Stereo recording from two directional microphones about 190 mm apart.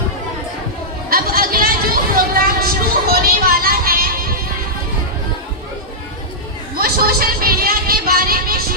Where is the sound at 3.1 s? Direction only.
50° right (ahead or behind).